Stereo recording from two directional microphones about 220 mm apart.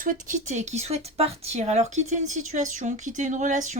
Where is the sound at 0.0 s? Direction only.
35° right (ahead or behind).